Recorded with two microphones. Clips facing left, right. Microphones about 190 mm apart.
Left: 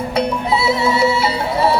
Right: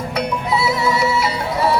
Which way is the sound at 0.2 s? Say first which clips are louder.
Left 2 dB; 30° left (ahead or behind).